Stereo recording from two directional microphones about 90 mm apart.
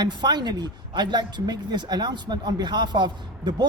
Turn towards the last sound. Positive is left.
turn(degrees=-55)  # may be behind; listen again after turning